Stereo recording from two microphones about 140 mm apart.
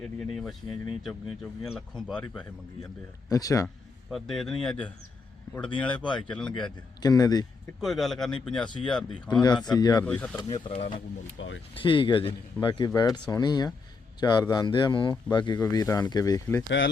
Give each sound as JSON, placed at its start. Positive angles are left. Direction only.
{"t": 0.0, "sound": "speech", "side_deg": 0}
{"t": 3.2, "sound": "speech", "side_deg": 25}
{"t": 4.1, "sound": "speech", "side_deg": 5}
{"t": 7.0, "sound": "speech", "side_deg": 30}
{"t": 7.8, "sound": "speech", "side_deg": 0}
{"t": 9.0, "sound": "speech", "side_deg": 30}
{"t": 10.0, "sound": "speech", "side_deg": 10}
{"t": 10.3, "sound": "speech", "side_deg": 30}
{"t": 11.7, "sound": "speech", "side_deg": 40}